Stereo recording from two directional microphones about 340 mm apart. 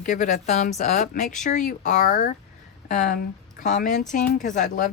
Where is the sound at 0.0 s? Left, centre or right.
Left.